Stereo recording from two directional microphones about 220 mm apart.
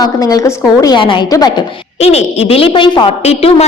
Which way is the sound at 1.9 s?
30° left (ahead or behind).